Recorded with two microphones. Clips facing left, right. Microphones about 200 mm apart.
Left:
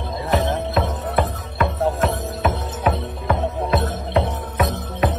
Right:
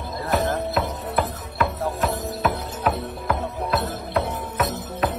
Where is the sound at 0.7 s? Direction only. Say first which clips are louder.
Left 3 dB; centre (ahead or behind).